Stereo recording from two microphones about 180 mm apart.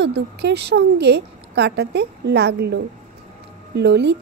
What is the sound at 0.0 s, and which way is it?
A woman's voice, 70° right (ahead or behind).